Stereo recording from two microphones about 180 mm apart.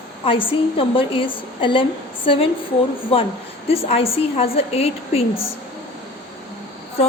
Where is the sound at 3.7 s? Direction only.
35° left (ahead or behind).